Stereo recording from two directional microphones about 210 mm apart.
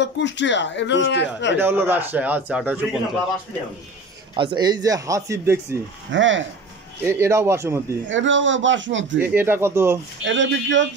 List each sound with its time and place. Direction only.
0.0 s a man's voice: 60° left (ahead or behind)
1.6 s a man's voice: 10° right (ahead or behind)
4.4 s a man's voice: 20° right (ahead or behind)
6.1 s a man's voice: 60° right (ahead or behind)
7.1 s a man's voice: 10° right (ahead or behind)
8.1 s a man's voice: 60° right (ahead or behind)
9.2 s a man's voice: 10° right (ahead or behind)
10.2 s a man's voice: 60° right (ahead or behind)